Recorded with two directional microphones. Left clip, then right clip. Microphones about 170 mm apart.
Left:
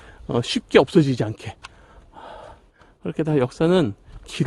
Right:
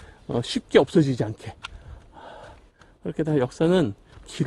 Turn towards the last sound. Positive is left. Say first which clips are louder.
# left 3 dB
turn(degrees=35)  # may be behind; listen again after turning